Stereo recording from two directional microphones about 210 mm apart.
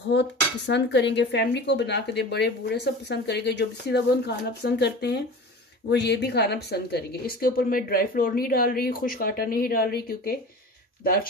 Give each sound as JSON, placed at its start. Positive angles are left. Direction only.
{"t": 0.1, "sound": "a woman's voice", "side_deg": 55}